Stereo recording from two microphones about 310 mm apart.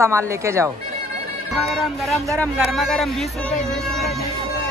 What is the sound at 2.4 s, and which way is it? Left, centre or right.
Speech, centre.